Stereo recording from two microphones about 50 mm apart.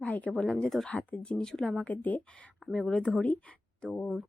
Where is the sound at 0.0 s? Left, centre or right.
Left.